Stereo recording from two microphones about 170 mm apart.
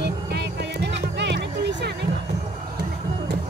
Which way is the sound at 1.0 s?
90° right.